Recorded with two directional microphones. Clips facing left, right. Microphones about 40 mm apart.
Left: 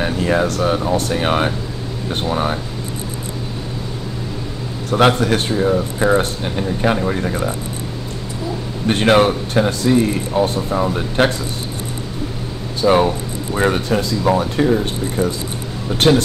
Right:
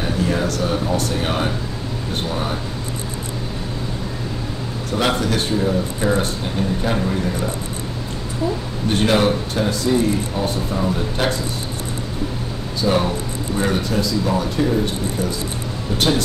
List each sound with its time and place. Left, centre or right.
0.0 s speech: left
4.9 s speech: left
7.1 s speech: left
8.8 s speech: left
12.8 s speech: centre
13.6 s speech: left